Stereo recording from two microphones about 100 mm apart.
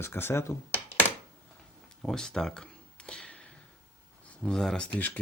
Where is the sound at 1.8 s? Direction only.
5° left (ahead or behind).